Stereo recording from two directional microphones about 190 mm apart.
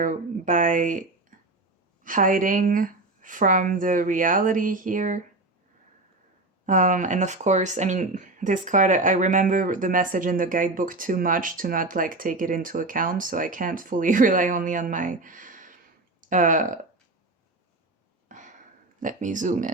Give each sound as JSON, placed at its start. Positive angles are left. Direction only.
{"t": 0.0, "sound": "speech", "side_deg": -45}
{"t": 1.3, "sound": "a sound", "side_deg": -45}
{"t": 2.0, "sound": "speech", "side_deg": -45}
{"t": 6.7, "sound": "speech", "side_deg": -40}
{"t": 18.9, "sound": "speech", "side_deg": -40}